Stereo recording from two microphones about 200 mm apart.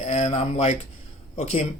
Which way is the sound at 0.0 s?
30° left (ahead or behind).